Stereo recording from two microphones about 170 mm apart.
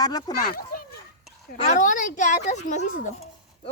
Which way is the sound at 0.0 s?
20° left (ahead or behind).